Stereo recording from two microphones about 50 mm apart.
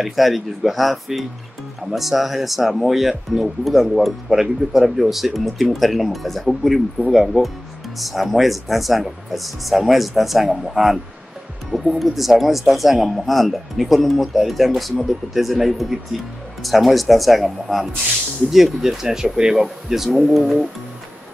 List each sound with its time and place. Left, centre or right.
0.0 s speech: centre
19.5 s speech: centre